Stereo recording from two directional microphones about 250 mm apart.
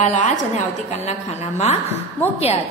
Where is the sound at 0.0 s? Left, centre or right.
Left.